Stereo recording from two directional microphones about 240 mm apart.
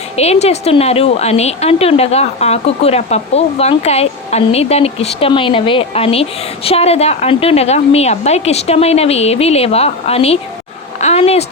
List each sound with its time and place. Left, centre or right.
0.2 s a woman's voice: left